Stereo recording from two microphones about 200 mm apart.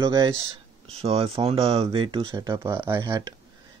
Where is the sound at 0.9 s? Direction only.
30° right (ahead or behind).